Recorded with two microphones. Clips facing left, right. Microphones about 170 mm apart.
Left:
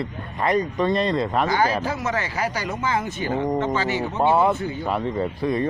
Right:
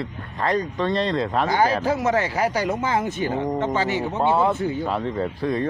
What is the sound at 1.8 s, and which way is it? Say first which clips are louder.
Speech: right 5 dB; 50° right (ahead or behind).